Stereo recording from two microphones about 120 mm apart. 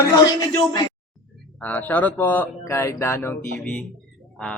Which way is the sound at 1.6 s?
15° left (ahead or behind).